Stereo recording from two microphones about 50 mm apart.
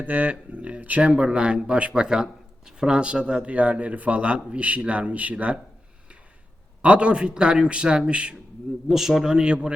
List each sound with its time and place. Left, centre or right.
0.0 s speech: right
6.8 s speech: right
8.9 s a man's voice: centre